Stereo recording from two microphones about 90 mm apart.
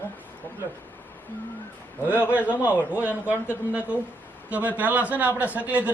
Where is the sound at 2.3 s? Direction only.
20° right (ahead or behind).